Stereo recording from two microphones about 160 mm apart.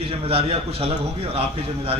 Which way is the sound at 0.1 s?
35° right (ahead or behind).